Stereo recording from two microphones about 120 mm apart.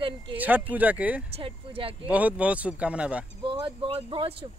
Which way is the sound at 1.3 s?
50° right (ahead or behind).